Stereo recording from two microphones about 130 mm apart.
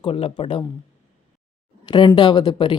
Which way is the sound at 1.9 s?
35° left (ahead or behind).